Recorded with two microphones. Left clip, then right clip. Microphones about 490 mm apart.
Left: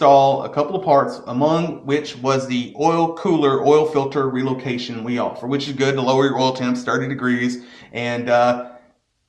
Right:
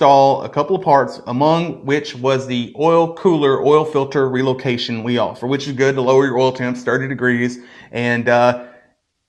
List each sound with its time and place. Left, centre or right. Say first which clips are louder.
0.0 s speech: right 2 dB; right
7.9 s speech: right 3 dB; right